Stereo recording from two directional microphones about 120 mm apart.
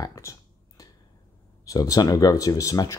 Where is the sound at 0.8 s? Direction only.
30° left (ahead or behind).